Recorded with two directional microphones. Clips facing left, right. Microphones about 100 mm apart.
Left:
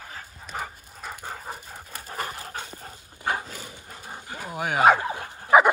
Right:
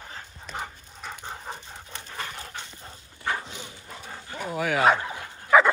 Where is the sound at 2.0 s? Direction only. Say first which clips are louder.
Left 4 dB; 40° left (ahead or behind).